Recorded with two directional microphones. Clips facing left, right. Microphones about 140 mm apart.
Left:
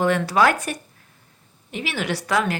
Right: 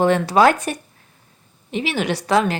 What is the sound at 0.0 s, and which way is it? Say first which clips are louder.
A woman's voice: right 4 dB; 30° right (ahead or behind).